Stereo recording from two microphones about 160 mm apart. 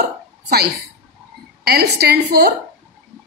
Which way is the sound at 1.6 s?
85° right.